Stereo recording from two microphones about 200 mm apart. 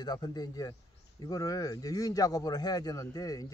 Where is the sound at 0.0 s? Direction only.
20° left (ahead or behind).